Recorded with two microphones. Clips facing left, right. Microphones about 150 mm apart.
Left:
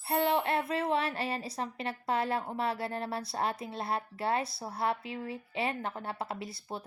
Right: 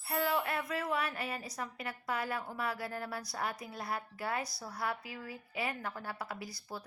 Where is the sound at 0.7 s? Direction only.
30° left (ahead or behind).